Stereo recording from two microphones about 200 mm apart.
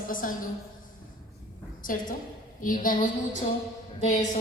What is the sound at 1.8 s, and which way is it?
A woman's voice, 45° left (ahead or behind).